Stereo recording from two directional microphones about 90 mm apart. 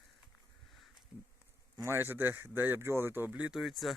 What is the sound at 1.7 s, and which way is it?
A man's voice, 30° right (ahead or behind).